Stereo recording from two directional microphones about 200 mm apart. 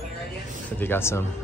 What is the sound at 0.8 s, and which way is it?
Speech, 10° left (ahead or behind).